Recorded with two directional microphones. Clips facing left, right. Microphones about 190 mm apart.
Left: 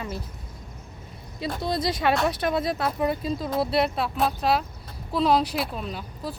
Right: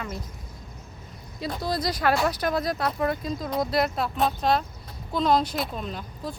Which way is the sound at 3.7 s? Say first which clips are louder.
Left 1 dB; 30° left (ahead or behind).